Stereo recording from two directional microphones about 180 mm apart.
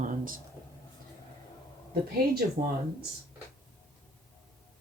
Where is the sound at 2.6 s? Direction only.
50° right (ahead or behind).